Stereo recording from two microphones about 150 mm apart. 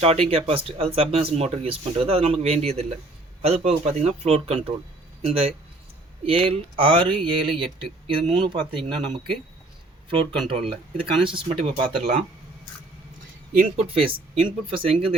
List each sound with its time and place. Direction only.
0.0 s speech: 40° right (ahead or behind)
10.5 s speech: 40° right (ahead or behind)
13.7 s speech: 40° right (ahead or behind)